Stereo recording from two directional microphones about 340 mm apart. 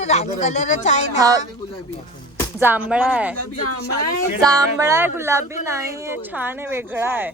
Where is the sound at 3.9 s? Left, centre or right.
Left.